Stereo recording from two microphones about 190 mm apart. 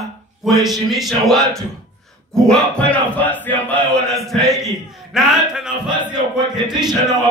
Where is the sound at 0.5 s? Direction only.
Centre (ahead or behind).